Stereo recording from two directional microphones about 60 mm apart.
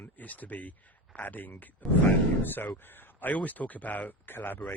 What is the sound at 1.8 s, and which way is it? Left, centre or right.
Speech, centre.